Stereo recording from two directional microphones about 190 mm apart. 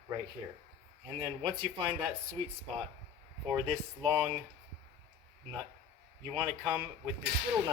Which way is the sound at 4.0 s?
25° right (ahead or behind).